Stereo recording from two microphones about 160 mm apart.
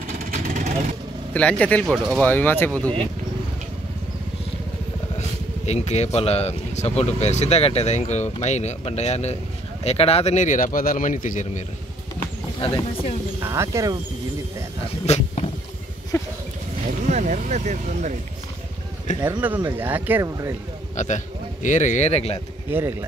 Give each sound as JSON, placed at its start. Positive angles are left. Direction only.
{"t": 0.2, "sound": "vehicle", "side_deg": -60}
{"t": 1.3, "sound": "a man's voice", "side_deg": 5}
{"t": 5.7, "sound": "speech", "side_deg": 45}
{"t": 13.4, "sound": "speech", "side_deg": -20}
{"t": 15.0, "sound": "vehicle", "side_deg": 40}
{"t": 16.1, "sound": "a sound", "side_deg": 20}
{"t": 17.1, "sound": "speech", "side_deg": -50}
{"t": 19.1, "sound": "speech", "side_deg": 45}
{"t": 19.4, "sound": "speech", "side_deg": -10}
{"t": 20.9, "sound": "speech", "side_deg": 50}
{"t": 22.7, "sound": "speech", "side_deg": -15}